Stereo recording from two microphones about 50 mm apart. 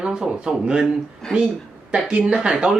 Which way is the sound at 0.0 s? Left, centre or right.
Centre.